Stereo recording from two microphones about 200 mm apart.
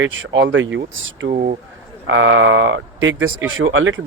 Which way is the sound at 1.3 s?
45° right (ahead or behind).